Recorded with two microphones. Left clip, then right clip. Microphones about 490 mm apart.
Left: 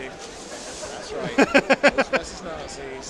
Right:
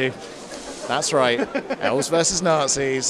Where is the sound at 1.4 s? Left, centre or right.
Left.